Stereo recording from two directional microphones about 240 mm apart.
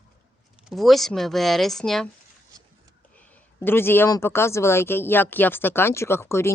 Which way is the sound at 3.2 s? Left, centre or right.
Centre.